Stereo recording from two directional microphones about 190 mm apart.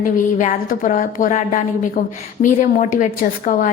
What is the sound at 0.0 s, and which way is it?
A woman's voice, 45° left (ahead or behind).